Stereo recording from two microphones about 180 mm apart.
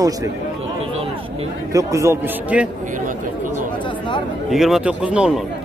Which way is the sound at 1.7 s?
15° right (ahead or behind).